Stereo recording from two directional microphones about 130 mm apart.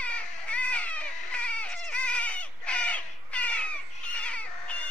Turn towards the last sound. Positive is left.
turn(degrees=10)  # may be behind; listen again after turning